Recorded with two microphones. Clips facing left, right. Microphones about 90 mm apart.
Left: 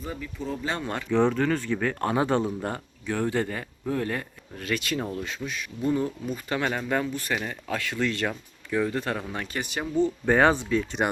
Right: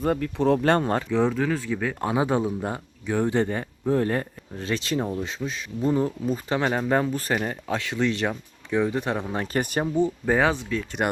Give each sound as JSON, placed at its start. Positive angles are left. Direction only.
{"t": 0.0, "sound": "speech", "side_deg": -65}
{"t": 0.8, "sound": "speech", "side_deg": -35}
{"t": 1.1, "sound": "speech", "side_deg": 0}
{"t": 9.6, "sound": "speech", "side_deg": -45}
{"t": 9.8, "sound": "speech", "side_deg": -15}
{"t": 10.2, "sound": "speech", "side_deg": 0}